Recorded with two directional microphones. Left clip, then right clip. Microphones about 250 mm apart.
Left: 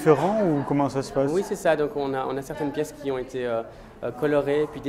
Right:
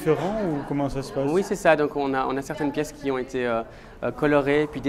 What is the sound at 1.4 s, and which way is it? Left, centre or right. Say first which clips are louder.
Speech: right 3 dB; right.